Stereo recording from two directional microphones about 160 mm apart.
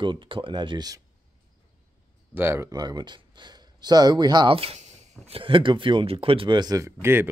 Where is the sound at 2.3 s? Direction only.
15° right (ahead or behind).